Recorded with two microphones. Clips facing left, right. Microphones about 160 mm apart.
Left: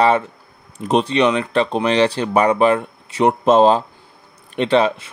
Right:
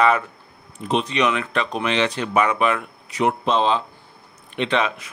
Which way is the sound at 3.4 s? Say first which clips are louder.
Left 7 dB; 45° left (ahead or behind).